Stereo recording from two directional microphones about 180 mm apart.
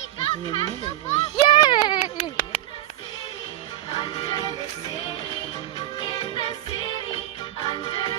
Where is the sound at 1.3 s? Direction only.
25° left (ahead or behind).